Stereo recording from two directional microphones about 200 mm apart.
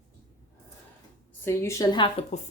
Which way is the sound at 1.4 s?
15° left (ahead or behind).